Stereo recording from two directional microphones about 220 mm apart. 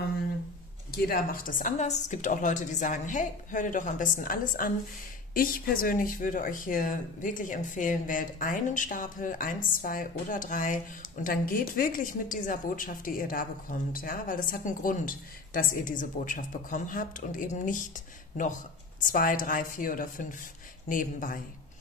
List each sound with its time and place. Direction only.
0.9 s speech: 45° left (ahead or behind)
19.0 s speech: 40° left (ahead or behind)